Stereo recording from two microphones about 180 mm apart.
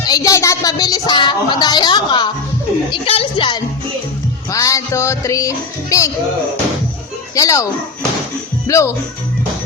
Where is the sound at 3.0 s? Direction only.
30° left (ahead or behind).